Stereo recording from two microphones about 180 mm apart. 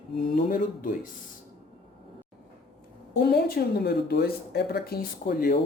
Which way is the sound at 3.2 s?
60° left (ahead or behind).